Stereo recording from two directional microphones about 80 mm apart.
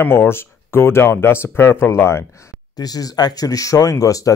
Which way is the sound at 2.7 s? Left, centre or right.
Left.